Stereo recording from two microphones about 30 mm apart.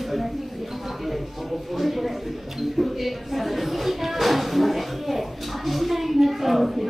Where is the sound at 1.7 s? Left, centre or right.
Centre.